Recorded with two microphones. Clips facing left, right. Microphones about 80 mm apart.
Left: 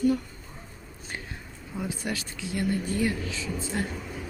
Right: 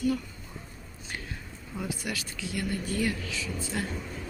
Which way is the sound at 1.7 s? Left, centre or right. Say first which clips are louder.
Left 2 dB; left.